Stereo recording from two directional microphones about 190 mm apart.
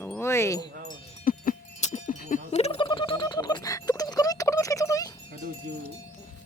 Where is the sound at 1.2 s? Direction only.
45° left (ahead or behind); by 5.1 s 20° left (ahead or behind).